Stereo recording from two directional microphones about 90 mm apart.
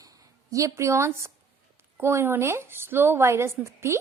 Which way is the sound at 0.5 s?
35° right (ahead or behind).